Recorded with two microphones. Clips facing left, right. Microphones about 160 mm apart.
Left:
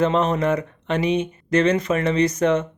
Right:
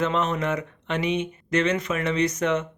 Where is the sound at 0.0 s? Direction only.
35° left (ahead or behind).